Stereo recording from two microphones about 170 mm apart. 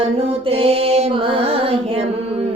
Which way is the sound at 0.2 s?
35° right (ahead or behind).